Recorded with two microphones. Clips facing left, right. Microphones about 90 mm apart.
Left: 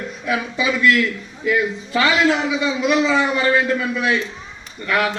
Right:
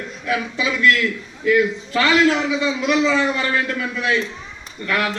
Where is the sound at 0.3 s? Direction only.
10° left (ahead or behind).